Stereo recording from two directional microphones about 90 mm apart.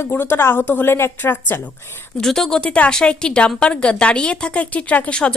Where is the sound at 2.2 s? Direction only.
5° left (ahead or behind).